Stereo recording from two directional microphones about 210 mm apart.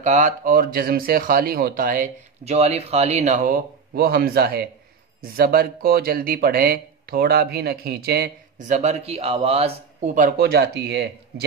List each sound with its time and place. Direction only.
0.0 s speech: 35° right (ahead or behind)